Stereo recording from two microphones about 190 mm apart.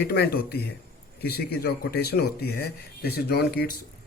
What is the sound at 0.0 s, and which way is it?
Speech, 55° left (ahead or behind).